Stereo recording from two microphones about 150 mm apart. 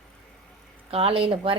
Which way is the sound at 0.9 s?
40° right (ahead or behind).